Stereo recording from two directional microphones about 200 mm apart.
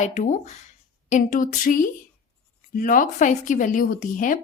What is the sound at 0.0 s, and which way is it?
Speech, 35° left (ahead or behind).